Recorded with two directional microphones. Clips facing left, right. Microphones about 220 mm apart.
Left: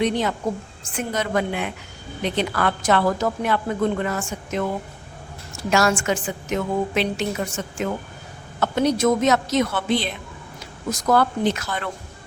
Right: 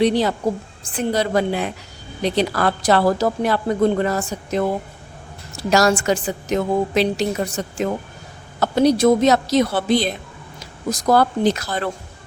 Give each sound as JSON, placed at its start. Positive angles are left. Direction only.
{"t": 0.0, "sound": "a woman's voice", "side_deg": -35}